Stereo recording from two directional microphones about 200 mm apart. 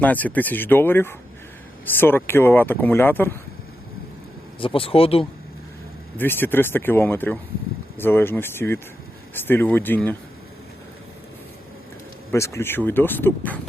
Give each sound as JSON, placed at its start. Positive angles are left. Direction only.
{"t": 0.0, "sound": "speech", "side_deg": 10}
{"t": 4.6, "sound": "speech", "side_deg": 25}
{"t": 6.1, "sound": "speech", "side_deg": 10}
{"t": 12.3, "sound": "speech", "side_deg": 15}